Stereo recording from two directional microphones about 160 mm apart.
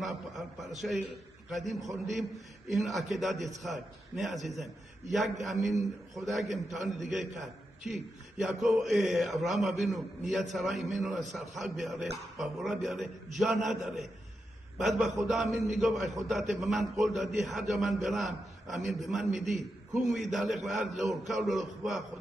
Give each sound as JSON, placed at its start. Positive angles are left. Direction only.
{"t": 0.0, "sound": "a man's voice", "side_deg": 0}
{"t": 8.5, "sound": "a man's voice", "side_deg": 0}